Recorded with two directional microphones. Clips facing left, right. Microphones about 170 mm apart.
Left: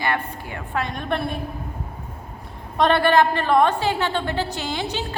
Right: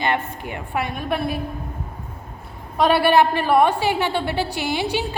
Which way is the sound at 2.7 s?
5° right (ahead or behind).